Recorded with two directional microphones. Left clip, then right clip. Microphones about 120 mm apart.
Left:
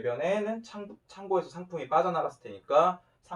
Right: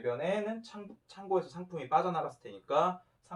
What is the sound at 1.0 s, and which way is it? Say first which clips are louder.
Speech: left 3 dB; 30° right (ahead or behind).